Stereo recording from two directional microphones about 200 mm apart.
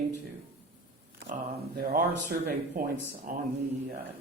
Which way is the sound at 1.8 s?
50° right (ahead or behind).